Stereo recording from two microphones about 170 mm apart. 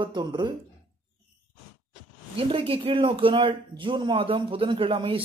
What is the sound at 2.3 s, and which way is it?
Speech, 30° right (ahead or behind).